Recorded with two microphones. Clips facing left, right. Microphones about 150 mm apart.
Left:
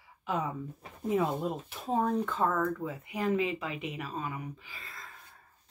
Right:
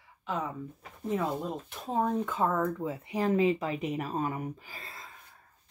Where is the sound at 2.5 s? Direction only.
25° right (ahead or behind).